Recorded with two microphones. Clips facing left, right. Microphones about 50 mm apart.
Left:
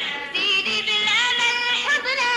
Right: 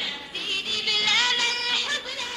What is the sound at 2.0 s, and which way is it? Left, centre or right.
Music, left.